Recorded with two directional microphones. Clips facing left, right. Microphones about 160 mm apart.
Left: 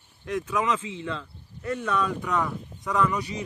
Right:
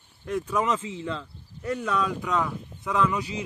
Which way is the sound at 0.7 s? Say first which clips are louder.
Even; 35° right (ahead or behind).